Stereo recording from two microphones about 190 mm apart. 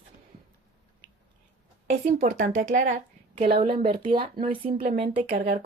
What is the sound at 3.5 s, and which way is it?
Speech, 30° right (ahead or behind).